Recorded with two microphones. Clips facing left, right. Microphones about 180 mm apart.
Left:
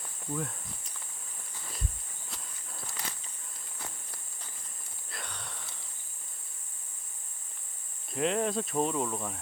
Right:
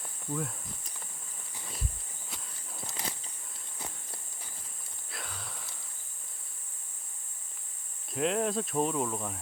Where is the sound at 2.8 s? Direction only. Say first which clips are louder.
Right 3 dB; 20° right (ahead or behind).